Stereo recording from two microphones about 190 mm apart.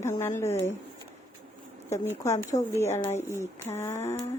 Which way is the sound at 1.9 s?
15° left (ahead or behind).